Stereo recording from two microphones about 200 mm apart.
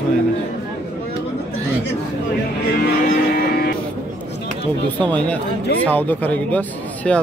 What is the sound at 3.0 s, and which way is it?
Music, 50° left (ahead or behind).